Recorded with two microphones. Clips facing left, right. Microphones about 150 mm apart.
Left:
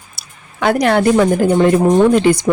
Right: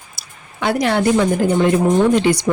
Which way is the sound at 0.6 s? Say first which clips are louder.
Left 4 dB; 50° left (ahead or behind).